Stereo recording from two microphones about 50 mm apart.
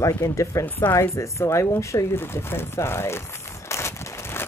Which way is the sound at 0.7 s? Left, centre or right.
Left.